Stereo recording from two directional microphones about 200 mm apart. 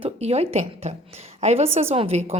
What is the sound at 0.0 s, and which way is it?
A woman's voice, 30° right (ahead or behind).